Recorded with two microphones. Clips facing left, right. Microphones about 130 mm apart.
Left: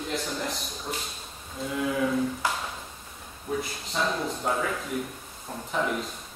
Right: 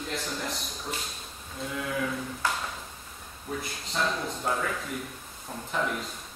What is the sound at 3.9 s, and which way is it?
A man's voice, centre (ahead or behind).